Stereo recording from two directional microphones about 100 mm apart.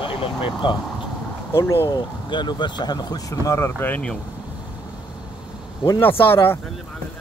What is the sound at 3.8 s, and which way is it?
Speech, 15° left (ahead or behind).